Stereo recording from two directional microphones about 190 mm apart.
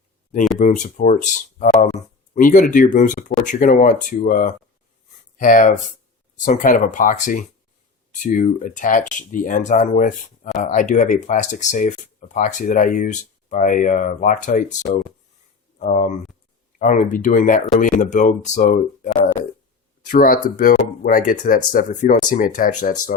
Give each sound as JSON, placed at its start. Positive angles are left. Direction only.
{"t": 0.3, "sound": "speech", "side_deg": 45}
{"t": 15.8, "sound": "speech", "side_deg": 40}